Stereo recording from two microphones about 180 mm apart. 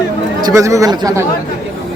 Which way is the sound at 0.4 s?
20° right (ahead or behind).